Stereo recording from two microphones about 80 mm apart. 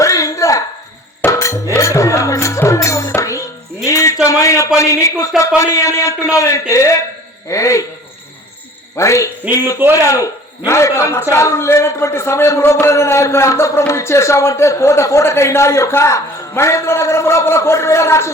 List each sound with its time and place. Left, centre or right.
0.0 s a sound: left
1.2 s music: left
3.8 s a man's voice: left
9.0 s a man's voice: left
9.8 s a man's voice: right
10.7 s a man's voice: left